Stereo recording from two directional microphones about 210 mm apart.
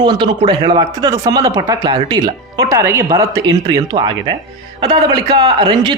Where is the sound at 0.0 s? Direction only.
20° right (ahead or behind).